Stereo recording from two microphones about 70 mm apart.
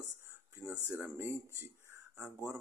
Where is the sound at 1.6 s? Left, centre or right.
Right.